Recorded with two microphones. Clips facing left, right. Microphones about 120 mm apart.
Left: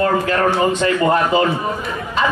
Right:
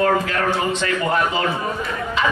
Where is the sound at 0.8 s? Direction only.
50° left (ahead or behind).